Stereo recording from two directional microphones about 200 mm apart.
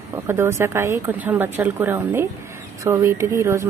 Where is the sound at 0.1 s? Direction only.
10° right (ahead or behind).